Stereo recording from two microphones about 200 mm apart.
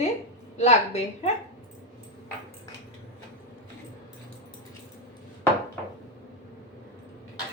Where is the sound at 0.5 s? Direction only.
35° left (ahead or behind).